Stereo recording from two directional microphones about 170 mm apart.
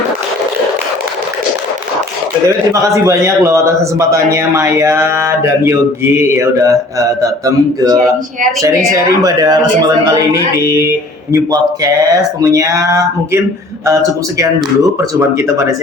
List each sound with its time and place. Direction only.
2.8 s a man's voice: 20° right (ahead or behind)
9.2 s a man's voice: 20° right (ahead or behind)